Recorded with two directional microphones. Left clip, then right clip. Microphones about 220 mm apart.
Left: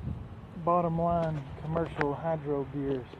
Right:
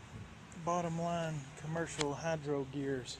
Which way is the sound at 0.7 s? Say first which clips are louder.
Left 9 dB; 10° right (ahead or behind).